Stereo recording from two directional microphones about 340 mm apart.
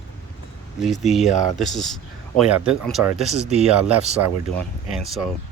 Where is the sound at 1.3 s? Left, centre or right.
Left.